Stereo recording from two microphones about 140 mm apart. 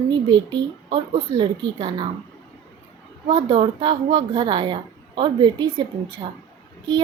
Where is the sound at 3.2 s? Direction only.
35° right (ahead or behind).